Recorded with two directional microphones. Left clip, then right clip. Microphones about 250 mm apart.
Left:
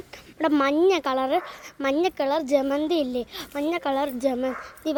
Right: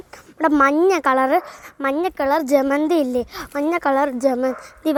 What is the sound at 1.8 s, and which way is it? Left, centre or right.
Speech, centre.